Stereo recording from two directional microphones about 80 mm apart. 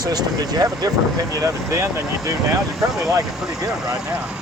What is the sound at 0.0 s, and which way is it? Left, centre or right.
Speech, right.